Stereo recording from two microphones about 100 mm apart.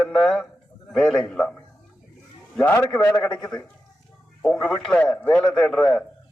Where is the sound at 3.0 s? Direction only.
30° left (ahead or behind).